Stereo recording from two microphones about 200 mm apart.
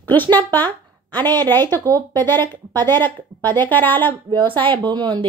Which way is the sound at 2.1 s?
10° left (ahead or behind).